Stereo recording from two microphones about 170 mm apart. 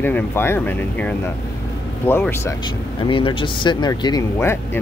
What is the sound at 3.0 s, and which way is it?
Speech, 30° left (ahead or behind).